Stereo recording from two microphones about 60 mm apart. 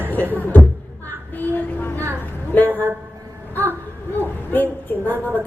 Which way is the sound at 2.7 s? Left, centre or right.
Right.